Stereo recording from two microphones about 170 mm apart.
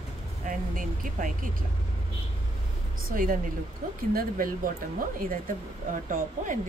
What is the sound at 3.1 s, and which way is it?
Speech, 55° right (ahead or behind).